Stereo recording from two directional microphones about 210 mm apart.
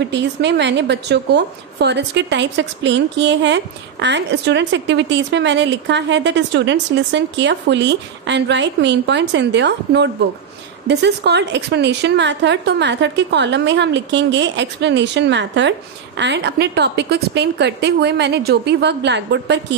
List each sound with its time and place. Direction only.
0.0 s a woman's voice: 55° right (ahead or behind)